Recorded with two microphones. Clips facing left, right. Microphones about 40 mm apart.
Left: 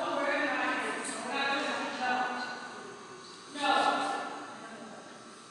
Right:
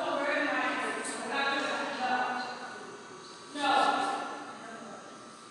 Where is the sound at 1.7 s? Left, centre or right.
Centre.